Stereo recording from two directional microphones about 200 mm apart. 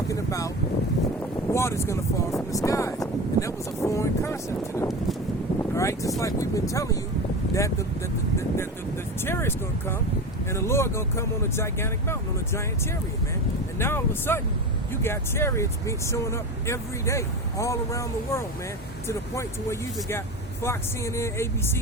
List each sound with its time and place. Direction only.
0.1 s boat: 15° left (ahead or behind)
1.2 s speech: 15° left (ahead or behind)
9.2 s speech: 10° left (ahead or behind)
13.7 s speech: 10° left (ahead or behind)